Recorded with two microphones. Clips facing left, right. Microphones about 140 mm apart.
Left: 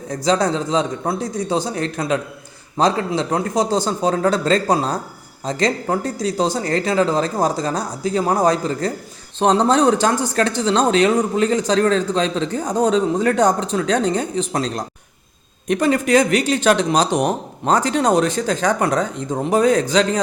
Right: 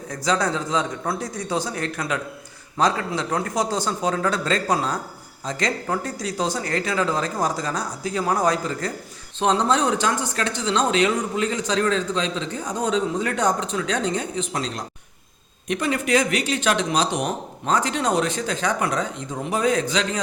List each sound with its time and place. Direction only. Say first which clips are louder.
0.1 s speech: left 5 dB; 30° left (ahead or behind)